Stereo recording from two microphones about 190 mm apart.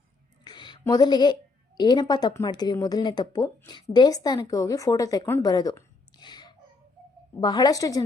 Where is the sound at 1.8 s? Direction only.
20° left (ahead or behind).